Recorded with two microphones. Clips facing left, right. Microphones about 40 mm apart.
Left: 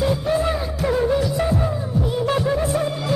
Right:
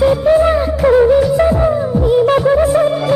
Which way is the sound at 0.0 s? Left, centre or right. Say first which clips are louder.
Right 10 dB; right.